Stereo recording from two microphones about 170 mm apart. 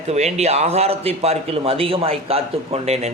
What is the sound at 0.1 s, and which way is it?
A man's voice, 40° right (ahead or behind).